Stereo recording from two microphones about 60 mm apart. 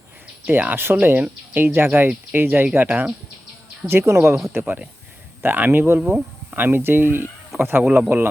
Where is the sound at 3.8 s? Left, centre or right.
Right.